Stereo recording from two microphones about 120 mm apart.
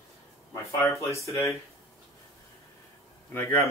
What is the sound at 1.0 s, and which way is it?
Speech, 25° left (ahead or behind).